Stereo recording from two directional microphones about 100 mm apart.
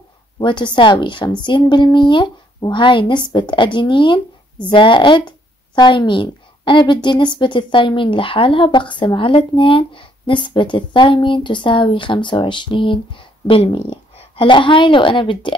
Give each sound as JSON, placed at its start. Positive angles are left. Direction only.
{"t": 0.4, "sound": "a woman's voice", "side_deg": 55}